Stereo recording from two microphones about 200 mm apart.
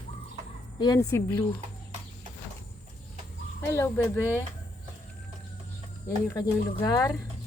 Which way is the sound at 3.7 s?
15° left (ahead or behind).